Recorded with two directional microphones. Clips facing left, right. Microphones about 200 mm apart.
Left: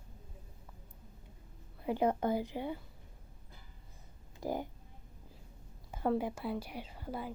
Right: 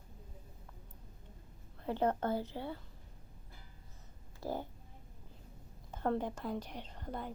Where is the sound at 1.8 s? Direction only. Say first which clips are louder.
Left 2 dB; 10° left (ahead or behind).